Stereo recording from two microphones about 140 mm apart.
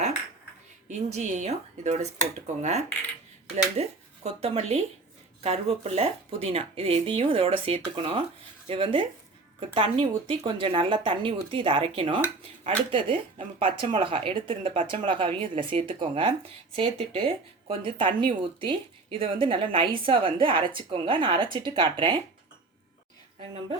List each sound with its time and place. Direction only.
0.9 s a woman's voice: 55° right (ahead or behind); by 22.2 s 35° right (ahead or behind)